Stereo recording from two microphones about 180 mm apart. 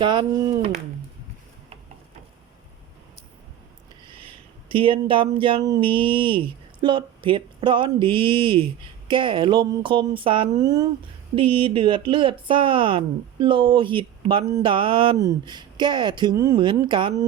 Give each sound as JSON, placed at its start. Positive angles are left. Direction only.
{"t": 0.0, "sound": "speech", "side_deg": -25}
{"t": 4.0, "sound": "a sound", "side_deg": -30}
{"t": 4.7, "sound": "speech", "side_deg": -30}